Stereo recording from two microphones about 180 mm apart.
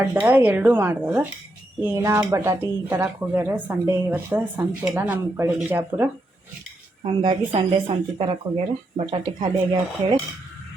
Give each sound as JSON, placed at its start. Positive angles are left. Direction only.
{"t": 0.0, "sound": "speech", "side_deg": -15}
{"t": 7.0, "sound": "speech", "side_deg": -25}